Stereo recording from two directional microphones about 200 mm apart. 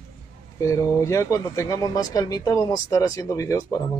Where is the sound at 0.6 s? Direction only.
15° left (ahead or behind).